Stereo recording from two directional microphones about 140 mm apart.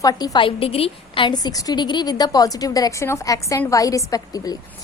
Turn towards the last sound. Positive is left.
turn(degrees=25)  # may be behind; listen again after turning